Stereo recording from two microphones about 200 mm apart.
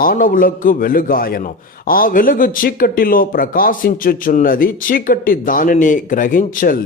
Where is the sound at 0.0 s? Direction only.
45° left (ahead or behind).